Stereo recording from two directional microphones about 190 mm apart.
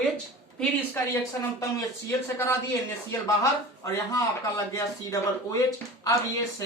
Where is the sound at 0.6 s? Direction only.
10° left (ahead or behind).